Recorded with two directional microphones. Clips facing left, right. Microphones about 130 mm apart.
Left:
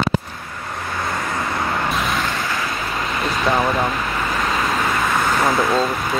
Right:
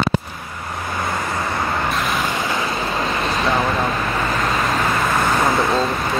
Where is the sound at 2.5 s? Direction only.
25° right (ahead or behind).